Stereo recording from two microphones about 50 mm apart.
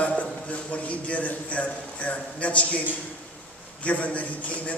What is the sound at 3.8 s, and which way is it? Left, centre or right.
Speech, left.